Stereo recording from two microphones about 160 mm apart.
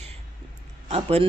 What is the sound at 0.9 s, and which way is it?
Speech, 40° right (ahead or behind).